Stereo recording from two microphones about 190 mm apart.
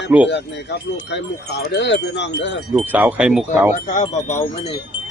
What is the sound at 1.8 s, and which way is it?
Wind chime, 65° left (ahead or behind).